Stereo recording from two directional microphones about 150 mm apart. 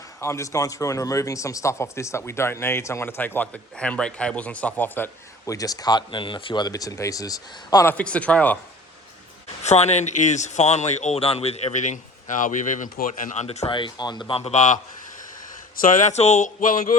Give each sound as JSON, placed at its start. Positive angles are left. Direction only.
{"t": 0.2, "sound": "speech", "side_deg": 20}
{"t": 7.9, "sound": "speech", "side_deg": 10}
{"t": 9.6, "sound": "speech", "side_deg": 50}
{"t": 13.7, "sound": "speech", "side_deg": 30}
{"t": 15.7, "sound": "speech", "side_deg": 65}